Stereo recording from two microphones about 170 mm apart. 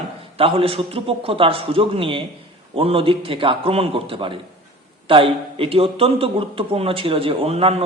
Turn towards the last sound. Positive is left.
turn(degrees=-35)  # may be behind; listen again after turning